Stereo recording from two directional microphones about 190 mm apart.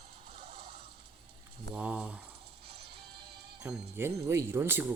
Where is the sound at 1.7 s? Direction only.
5° right (ahead or behind).